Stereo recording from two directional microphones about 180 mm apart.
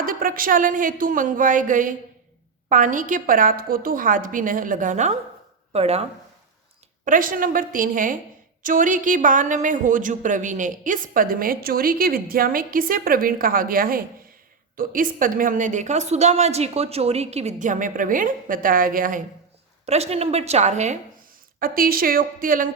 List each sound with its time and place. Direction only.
0.0 s a woman's voice: 50° right (ahead or behind); by 6.1 s 35° right (ahead or behind)
7.0 s a woman's voice: 50° right (ahead or behind)
19.8 s a woman's voice: 35° right (ahead or behind)
21.6 s a woman's voice: 55° right (ahead or behind)